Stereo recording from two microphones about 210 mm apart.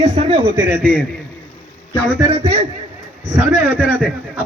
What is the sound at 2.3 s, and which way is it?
Speech, 25° right (ahead or behind).